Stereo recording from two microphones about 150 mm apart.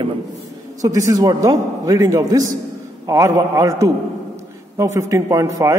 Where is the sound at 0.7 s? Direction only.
20° right (ahead or behind).